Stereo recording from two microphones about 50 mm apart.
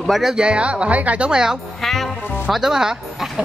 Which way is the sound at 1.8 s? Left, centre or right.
Centre.